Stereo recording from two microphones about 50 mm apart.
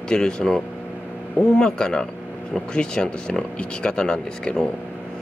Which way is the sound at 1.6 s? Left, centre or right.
Centre.